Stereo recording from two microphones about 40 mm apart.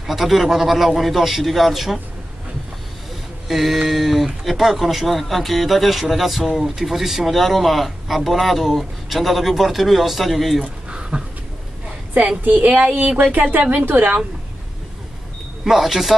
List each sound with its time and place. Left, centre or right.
0.0 s speech: centre
3.4 s speech: centre
10.6 s a sound: right
12.4 s a woman's voice: right
13.2 s a woman's voice: right
15.6 s speech: centre